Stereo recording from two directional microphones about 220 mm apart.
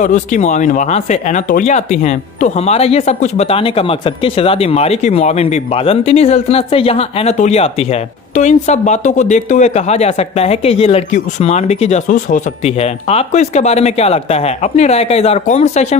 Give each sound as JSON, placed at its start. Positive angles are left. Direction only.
{"t": 0.0, "sound": "speech", "side_deg": 35}